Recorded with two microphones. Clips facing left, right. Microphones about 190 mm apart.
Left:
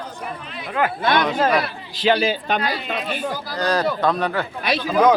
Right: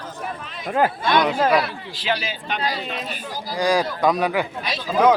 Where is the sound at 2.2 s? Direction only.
35° left (ahead or behind).